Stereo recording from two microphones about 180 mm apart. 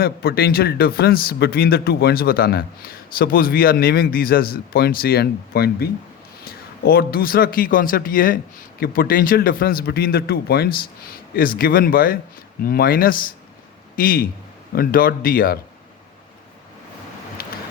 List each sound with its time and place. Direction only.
0.0 s a man's voice: 60° left (ahead or behind)